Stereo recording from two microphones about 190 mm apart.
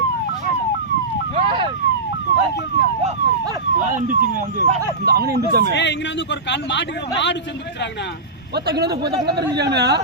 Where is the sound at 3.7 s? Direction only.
40° right (ahead or behind).